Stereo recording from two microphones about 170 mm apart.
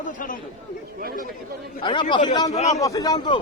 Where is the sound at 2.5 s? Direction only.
40° left (ahead or behind).